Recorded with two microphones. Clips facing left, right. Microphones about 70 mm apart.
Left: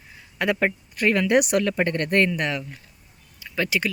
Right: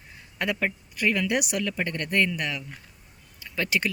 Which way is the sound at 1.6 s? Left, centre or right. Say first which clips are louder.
Left 6 dB; left.